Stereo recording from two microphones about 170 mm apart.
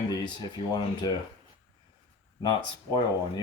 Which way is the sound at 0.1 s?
25° left (ahead or behind).